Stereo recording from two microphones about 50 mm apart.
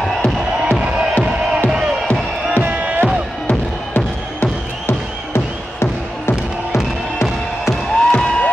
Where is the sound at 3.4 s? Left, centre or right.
Left.